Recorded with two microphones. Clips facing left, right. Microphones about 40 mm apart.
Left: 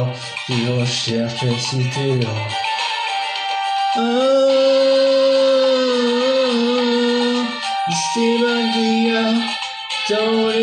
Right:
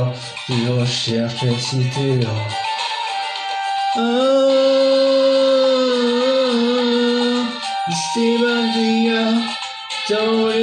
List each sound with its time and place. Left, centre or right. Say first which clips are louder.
2.6 s music: left 2 dB; left
4.0 s music: even; centre
9.1 s music: even; centre